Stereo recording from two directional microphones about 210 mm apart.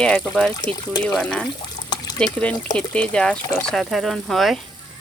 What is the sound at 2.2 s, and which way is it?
Speech, 5° left (ahead or behind).